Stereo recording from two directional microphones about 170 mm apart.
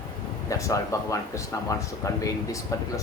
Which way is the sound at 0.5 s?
20° left (ahead or behind).